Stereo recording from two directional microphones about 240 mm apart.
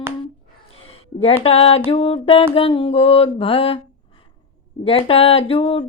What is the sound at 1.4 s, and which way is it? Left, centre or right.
Mantra, left.